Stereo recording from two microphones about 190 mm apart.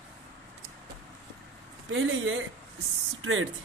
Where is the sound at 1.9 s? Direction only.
90° right.